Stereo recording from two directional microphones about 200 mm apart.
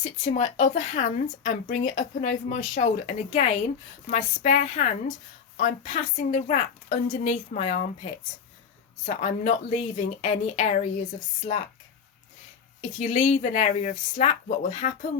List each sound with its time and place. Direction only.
0.0 s speech: 35° left (ahead or behind)
9.0 s speech: 40° left (ahead or behind)
13.0 s speech: 35° left (ahead or behind)